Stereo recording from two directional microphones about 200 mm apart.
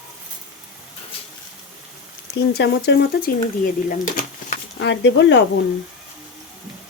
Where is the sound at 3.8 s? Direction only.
40° left (ahead or behind).